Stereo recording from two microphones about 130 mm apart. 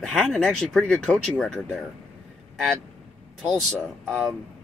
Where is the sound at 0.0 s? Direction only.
5° left (ahead or behind).